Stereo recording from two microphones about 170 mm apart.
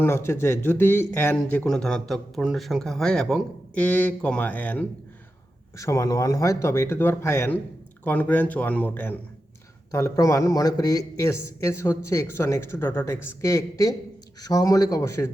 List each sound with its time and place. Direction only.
0.0 s a man's voice: 15° left (ahead or behind)